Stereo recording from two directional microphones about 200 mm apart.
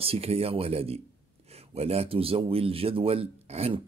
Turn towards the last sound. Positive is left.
turn(degrees=-30)  # may be behind; listen again after turning